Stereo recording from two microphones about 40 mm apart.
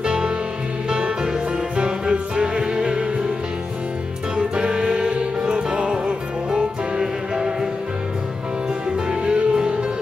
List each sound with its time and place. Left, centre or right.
0.0 s music: right
4.4 s music: centre
9.1 s music: centre